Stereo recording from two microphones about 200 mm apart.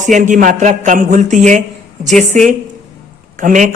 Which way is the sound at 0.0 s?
40° right (ahead or behind).